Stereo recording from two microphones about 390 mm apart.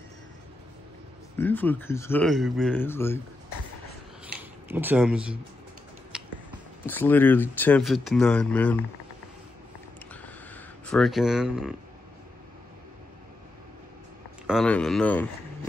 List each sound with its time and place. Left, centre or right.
1.4 s speech: centre
4.4 s speech: centre
6.1 s finger snapping: centre
6.9 s speech: centre
10.2 s a sound: centre
14.4 s speech: centre